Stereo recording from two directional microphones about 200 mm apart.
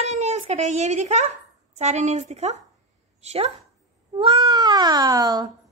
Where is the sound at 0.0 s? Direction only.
35° right (ahead or behind).